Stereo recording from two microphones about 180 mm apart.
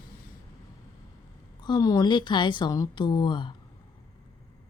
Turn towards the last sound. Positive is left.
turn(degrees=25)  # may be behind; listen again after turning